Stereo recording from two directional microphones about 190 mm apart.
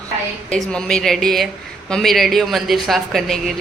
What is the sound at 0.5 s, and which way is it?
A woman's voice, 5° left (ahead or behind).